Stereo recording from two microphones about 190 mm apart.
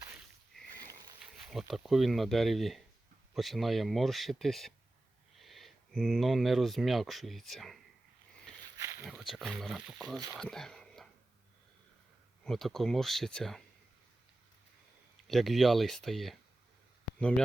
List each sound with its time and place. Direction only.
1.5 s speech: centre (ahead or behind)
8.8 s a sound: 15° right (ahead or behind)
9.0 s speech: centre (ahead or behind)
12.5 s speech: centre (ahead or behind)
15.3 s speech: centre (ahead or behind)